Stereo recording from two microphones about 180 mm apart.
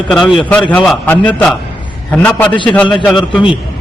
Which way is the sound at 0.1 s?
Centre (ahead or behind).